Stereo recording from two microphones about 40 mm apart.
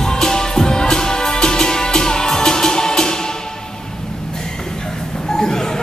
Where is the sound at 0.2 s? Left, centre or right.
Centre.